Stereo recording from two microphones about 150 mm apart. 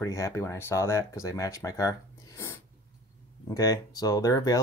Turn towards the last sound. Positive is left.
turn(degrees=25)  # may be behind; listen again after turning